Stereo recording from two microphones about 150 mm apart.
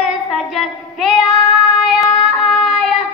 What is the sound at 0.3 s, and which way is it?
Child singing, centre (ahead or behind).